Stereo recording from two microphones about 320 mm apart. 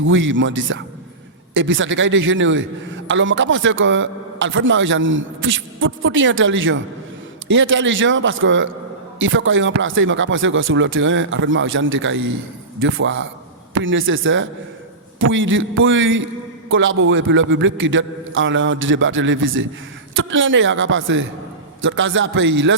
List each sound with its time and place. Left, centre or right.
0.1 s a man's voice: right